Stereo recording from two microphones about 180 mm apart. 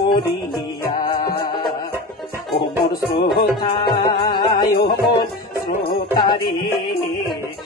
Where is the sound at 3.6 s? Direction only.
25° left (ahead or behind).